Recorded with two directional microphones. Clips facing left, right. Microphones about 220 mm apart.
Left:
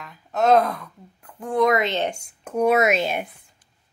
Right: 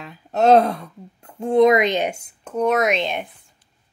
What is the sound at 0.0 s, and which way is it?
Speech, 30° right (ahead or behind).